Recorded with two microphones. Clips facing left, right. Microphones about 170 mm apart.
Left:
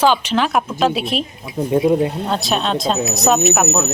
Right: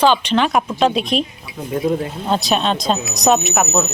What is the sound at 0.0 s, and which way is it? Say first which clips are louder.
Speech: right 1 dB; 10° left (ahead or behind).